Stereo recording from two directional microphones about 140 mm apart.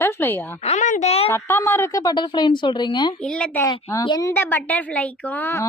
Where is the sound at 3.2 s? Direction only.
5° left (ahead or behind).